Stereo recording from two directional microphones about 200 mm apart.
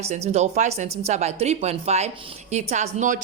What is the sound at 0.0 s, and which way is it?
Speech, 35° right (ahead or behind).